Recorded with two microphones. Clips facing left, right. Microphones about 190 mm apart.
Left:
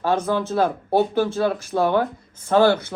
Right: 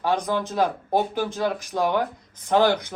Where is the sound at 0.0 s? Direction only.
15° right (ahead or behind).